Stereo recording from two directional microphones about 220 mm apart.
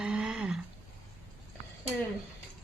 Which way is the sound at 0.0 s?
Centre (ahead or behind).